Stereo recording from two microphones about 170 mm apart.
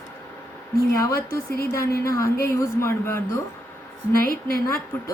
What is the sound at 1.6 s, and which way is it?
A woman's voice, 15° left (ahead or behind).